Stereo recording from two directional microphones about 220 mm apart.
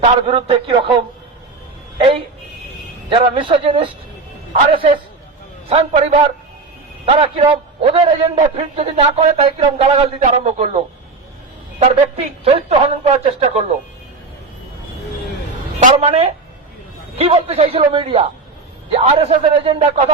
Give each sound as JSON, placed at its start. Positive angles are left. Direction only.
{"t": 0.0, "sound": "a man's voice", "side_deg": -25}
{"t": 2.0, "sound": "a man's voice", "side_deg": -25}
{"t": 15.8, "sound": "a man's voice", "side_deg": -30}